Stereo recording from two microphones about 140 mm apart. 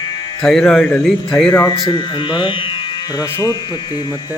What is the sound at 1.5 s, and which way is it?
Speech, 25° left (ahead or behind).